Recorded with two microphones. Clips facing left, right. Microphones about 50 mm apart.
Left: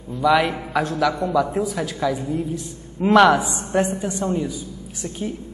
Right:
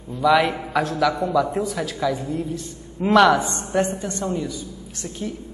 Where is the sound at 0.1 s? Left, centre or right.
Centre.